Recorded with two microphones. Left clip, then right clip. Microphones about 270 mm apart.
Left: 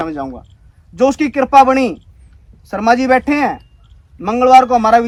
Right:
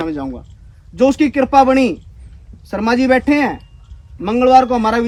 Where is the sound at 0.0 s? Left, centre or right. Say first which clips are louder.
Left 1 dB; centre.